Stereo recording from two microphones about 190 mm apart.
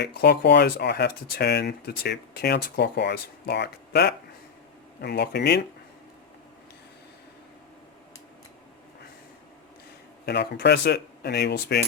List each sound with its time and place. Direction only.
0.0 s speech: 60° left (ahead or behind)
10.2 s speech: 60° left (ahead or behind)